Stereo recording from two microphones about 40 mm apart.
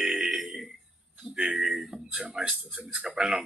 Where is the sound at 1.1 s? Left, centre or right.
Right.